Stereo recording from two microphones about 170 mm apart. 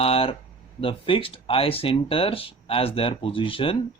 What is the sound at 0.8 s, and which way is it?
Speech, 30° left (ahead or behind).